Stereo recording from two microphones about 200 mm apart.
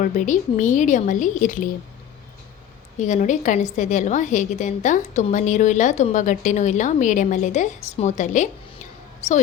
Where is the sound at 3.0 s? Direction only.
40° left (ahead or behind).